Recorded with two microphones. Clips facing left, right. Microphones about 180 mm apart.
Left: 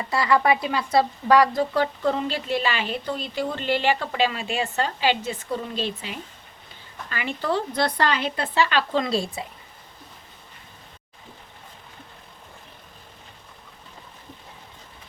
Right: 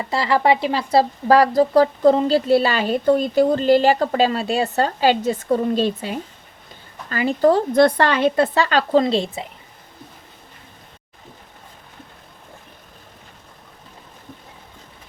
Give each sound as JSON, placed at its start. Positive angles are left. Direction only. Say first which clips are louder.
{"t": 0.0, "sound": "speech", "louder": "right 3 dB", "side_deg": -25}
{"t": 9.0, "sound": "speech", "louder": "right 5 dB", "side_deg": -25}